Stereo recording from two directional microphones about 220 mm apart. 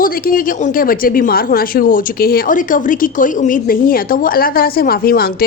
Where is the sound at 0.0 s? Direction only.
40° left (ahead or behind).